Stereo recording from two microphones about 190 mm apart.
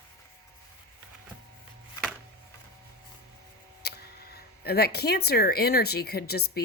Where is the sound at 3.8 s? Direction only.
55° left (ahead or behind).